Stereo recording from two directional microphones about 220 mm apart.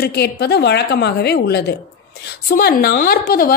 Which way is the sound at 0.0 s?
50° left (ahead or behind).